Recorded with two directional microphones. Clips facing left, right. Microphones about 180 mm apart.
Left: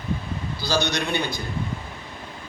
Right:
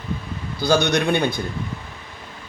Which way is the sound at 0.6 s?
55° right (ahead or behind).